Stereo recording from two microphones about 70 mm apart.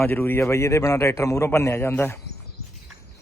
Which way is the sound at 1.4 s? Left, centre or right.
Left.